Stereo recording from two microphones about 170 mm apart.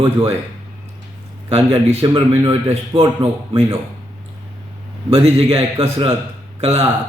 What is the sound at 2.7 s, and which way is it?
Speech, 35° right (ahead or behind).